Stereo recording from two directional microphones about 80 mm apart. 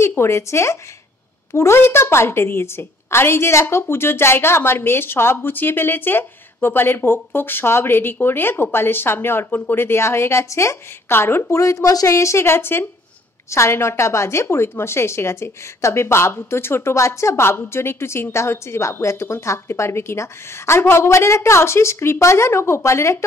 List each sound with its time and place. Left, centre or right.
0.0 s a woman's voice: left
11.6 s a woman's voice: left